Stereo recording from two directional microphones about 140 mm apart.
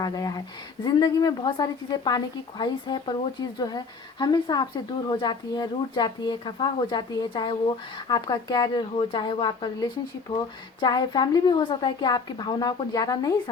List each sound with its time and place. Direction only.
0.0 s a woman's voice: 25° left (ahead or behind)